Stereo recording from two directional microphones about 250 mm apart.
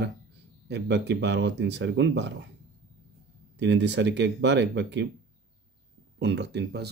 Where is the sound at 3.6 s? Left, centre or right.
Right.